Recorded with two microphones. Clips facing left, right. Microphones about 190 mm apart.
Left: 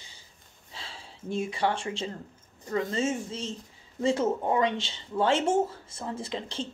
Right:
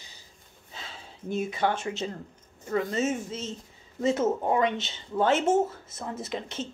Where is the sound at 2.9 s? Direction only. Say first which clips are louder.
Even; 30° left (ahead or behind).